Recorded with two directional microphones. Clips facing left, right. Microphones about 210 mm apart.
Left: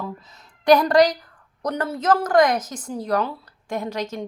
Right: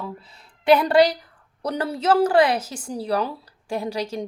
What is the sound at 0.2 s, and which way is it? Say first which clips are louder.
Speech: even; 30° right (ahead or behind).